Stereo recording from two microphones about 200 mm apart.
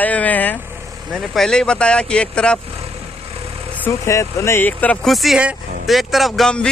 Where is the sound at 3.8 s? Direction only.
15° left (ahead or behind).